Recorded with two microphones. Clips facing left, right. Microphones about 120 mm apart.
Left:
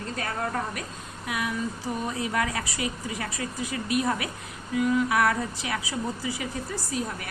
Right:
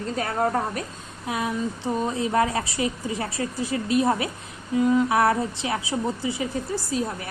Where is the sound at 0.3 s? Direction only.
35° right (ahead or behind).